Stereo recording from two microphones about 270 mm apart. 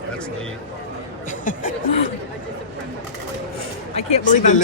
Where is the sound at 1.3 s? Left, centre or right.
Left.